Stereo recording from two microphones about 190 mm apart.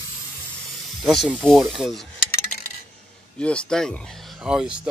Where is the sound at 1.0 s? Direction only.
Centre (ahead or behind).